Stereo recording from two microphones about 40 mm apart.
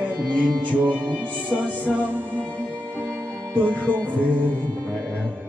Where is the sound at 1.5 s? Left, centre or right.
Right.